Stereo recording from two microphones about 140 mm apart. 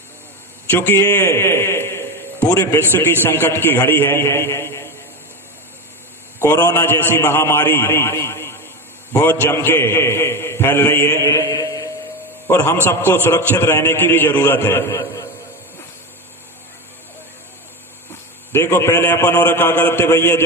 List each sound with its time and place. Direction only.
0.7 s a man's voice: 15° left (ahead or behind)
6.4 s a man's voice: 20° left (ahead or behind)
18.1 s a man's voice: 15° left (ahead or behind)